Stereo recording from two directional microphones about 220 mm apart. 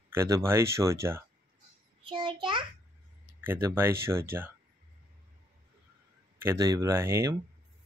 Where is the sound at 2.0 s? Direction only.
25° right (ahead or behind).